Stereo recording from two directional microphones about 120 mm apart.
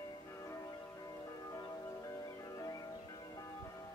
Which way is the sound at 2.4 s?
30° left (ahead or behind).